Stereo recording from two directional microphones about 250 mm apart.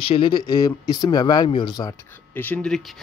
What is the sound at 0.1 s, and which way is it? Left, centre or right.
Speech, centre.